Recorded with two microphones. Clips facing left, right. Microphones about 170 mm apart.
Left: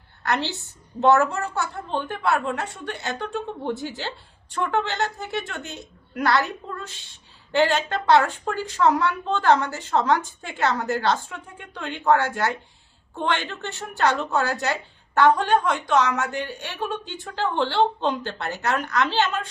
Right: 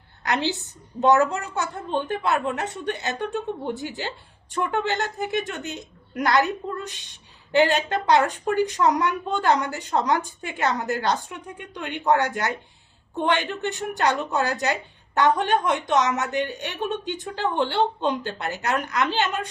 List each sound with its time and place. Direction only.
0.3 s a woman's voice: 15° right (ahead or behind)